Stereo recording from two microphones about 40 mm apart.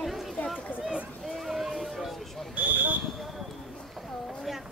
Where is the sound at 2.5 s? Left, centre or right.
Right.